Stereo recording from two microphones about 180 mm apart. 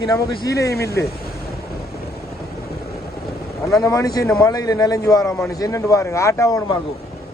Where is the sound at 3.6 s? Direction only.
20° left (ahead or behind).